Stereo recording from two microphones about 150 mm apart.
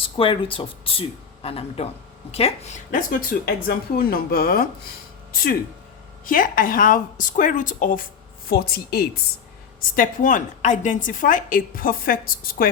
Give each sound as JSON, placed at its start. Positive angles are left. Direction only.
{"t": 0.0, "sound": "speech", "side_deg": 35}
{"t": 6.2, "sound": "a woman's voice", "side_deg": 65}
{"t": 8.4, "sound": "speech", "side_deg": 90}
{"t": 9.9, "sound": "a woman's voice", "side_deg": 65}